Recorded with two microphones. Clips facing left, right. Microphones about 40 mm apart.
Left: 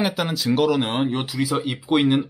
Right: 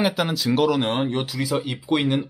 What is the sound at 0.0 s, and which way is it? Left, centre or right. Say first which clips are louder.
Speech: right 1 dB; centre.